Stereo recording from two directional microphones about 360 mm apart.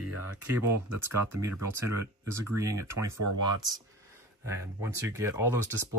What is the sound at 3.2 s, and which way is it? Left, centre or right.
Speech, right.